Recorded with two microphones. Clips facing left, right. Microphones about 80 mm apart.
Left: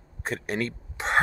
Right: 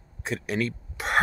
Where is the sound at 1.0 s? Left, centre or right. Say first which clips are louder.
Left 1 dB; left.